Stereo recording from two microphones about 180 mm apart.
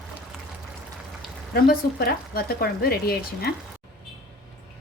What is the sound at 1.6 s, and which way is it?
Speech, 55° left (ahead or behind).